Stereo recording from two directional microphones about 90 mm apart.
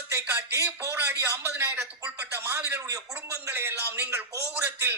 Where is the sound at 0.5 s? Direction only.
30° right (ahead or behind).